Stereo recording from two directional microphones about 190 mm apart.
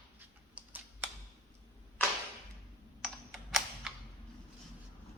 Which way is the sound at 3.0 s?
Centre (ahead or behind).